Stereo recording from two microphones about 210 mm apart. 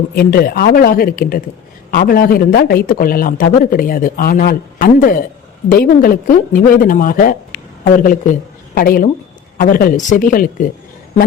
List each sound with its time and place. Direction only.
0.2 s a man's voice: 45° left (ahead or behind)